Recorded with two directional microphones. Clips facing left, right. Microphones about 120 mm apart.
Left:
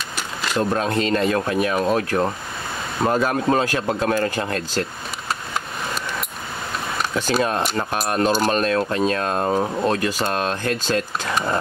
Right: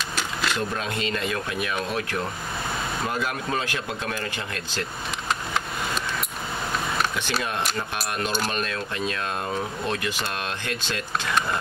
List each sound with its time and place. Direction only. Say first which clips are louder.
0.1 s vehicle: even; 5° left (ahead or behind)
0.6 s speech: left 8 dB; 40° left (ahead or behind)
7.2 s speech: left 7 dB; 40° left (ahead or behind)